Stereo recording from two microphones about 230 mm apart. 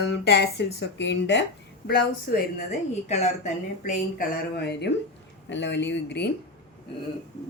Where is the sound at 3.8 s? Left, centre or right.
Left.